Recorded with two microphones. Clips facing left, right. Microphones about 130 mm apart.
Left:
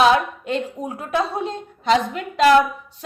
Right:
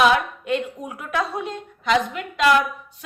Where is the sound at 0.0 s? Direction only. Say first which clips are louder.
Left 2 dB; 30° left (ahead or behind).